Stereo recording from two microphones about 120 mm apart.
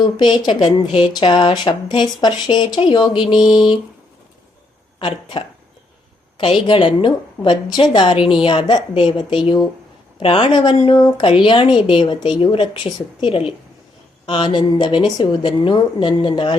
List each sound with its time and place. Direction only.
0.0 s speech: 35° left (ahead or behind)
4.9 s speech: 45° left (ahead or behind)
6.4 s a woman's voice: 45° left (ahead or behind)
11.2 s a woman's voice: 45° left (ahead or behind)